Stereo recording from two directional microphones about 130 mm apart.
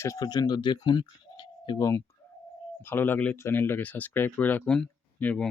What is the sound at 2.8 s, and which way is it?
Speech, 15° left (ahead or behind).